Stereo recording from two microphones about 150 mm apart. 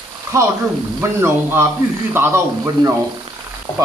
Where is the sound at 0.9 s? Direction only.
15° right (ahead or behind).